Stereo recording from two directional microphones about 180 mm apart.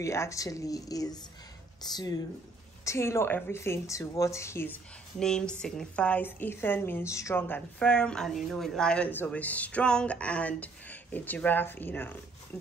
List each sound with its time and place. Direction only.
0.0 s speech: 15° left (ahead or behind)